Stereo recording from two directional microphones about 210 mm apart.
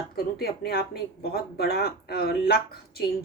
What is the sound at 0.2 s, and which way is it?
A woman's voice, 50° left (ahead or behind).